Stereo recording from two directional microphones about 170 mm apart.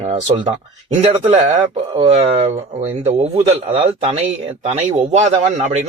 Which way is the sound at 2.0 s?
35° right (ahead or behind).